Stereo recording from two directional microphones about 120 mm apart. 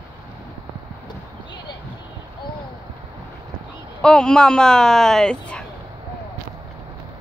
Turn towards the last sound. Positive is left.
turn(degrees=10)  # may be behind; listen again after turning